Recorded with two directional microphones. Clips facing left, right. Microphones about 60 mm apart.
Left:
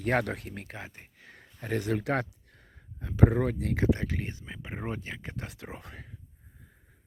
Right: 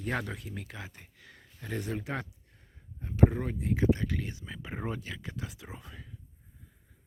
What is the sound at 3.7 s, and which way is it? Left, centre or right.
Speech, left.